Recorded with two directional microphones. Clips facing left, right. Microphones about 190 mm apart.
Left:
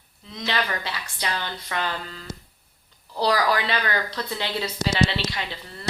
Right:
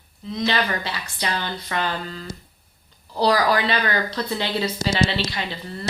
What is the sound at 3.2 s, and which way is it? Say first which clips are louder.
A woman's voice: right 3 dB; 30° right (ahead or behind).